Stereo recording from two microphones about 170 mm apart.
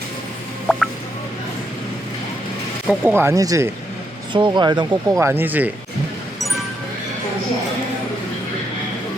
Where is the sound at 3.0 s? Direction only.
15° right (ahead or behind).